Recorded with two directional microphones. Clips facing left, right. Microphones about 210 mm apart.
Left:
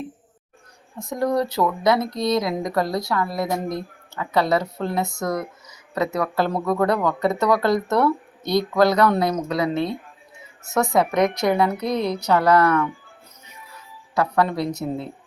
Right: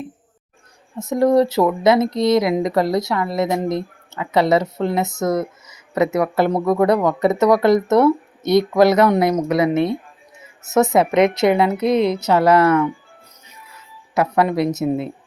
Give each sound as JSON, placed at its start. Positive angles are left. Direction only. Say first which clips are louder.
{"t": 0.9, "sound": "speech", "louder": "right 7 dB", "side_deg": -25}
{"t": 14.2, "sound": "speech", "louder": "right 4 dB", "side_deg": -20}